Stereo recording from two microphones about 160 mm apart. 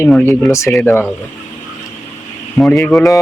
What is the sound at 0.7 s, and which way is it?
Speech, 15° left (ahead or behind).